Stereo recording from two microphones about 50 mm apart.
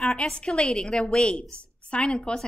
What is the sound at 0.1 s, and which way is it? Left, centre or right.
A woman's voice, centre.